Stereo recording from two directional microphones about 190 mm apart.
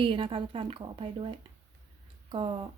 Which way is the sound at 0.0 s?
25° right (ahead or behind).